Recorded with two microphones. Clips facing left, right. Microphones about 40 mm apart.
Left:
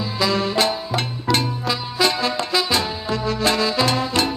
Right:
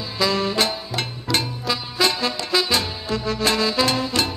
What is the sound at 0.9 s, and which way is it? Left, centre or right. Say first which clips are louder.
Music: left 3 dB; centre.